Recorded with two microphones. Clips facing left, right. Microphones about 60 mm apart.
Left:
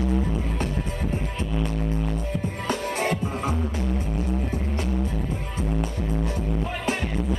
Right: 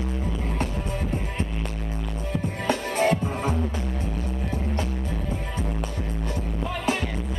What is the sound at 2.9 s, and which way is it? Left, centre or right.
Music, right.